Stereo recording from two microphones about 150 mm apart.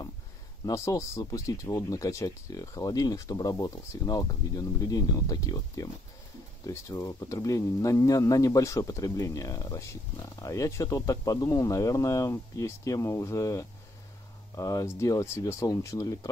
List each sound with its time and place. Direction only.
0.7 s speech: 20° left (ahead or behind)